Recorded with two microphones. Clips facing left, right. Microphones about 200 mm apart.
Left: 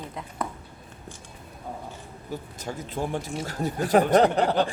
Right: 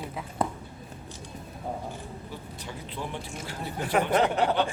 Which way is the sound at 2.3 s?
45° left (ahead or behind).